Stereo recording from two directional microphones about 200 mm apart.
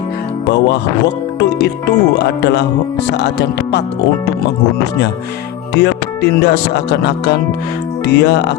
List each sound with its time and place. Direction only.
0.4 s speech: 60° left (ahead or behind)
5.7 s speech: 55° left (ahead or behind)